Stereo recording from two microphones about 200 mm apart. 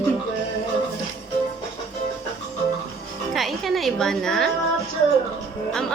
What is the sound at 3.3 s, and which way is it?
A woman's voice, centre (ahead or behind).